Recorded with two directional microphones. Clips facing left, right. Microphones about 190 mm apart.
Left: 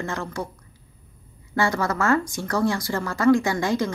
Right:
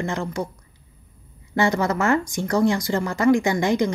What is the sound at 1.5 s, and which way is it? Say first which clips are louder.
A woman's voice: right 3 dB; 20° right (ahead or behind).